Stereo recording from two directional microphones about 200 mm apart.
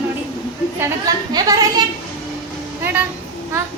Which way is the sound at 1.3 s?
20° right (ahead or behind).